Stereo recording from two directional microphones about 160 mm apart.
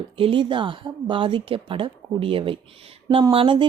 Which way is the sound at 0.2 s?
35° right (ahead or behind).